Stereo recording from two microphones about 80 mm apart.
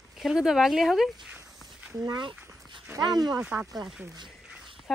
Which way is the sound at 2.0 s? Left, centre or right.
Right.